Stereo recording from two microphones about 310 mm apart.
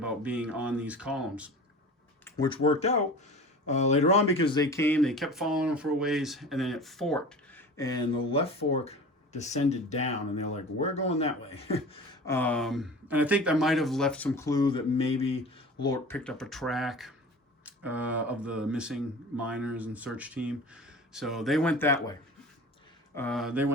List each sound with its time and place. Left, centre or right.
0.0 s speech: centre
2.2 s speech: centre
23.1 s speech: centre